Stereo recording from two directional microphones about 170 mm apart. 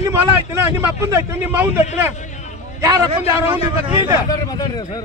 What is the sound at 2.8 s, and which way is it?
Speech, 20° right (ahead or behind).